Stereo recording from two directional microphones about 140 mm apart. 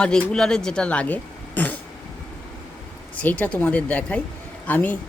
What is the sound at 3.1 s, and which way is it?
A woman's voice, 10° left (ahead or behind).